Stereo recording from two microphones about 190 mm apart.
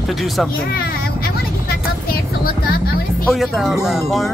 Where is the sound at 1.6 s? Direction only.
55° left (ahead or behind).